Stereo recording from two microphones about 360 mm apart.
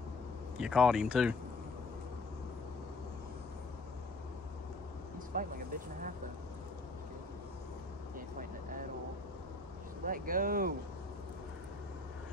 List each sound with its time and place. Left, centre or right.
0.6 s speech: centre
5.3 s speech: right
10.0 s speech: right